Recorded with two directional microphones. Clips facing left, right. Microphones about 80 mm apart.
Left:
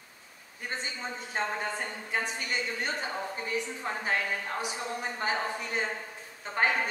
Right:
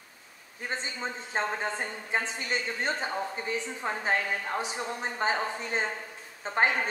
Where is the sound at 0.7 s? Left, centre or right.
Right.